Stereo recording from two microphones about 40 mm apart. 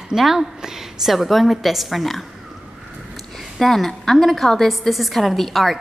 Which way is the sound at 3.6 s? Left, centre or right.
Centre.